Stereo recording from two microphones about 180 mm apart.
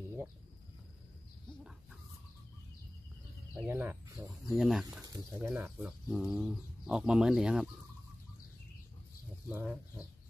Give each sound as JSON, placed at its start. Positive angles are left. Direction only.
{"t": 3.6, "sound": "speech", "side_deg": -10}
{"t": 4.6, "sound": "speech", "side_deg": 0}
{"t": 5.0, "sound": "speech", "side_deg": -20}
{"t": 5.5, "sound": "speech", "side_deg": -5}
{"t": 9.5, "sound": "speech", "side_deg": -10}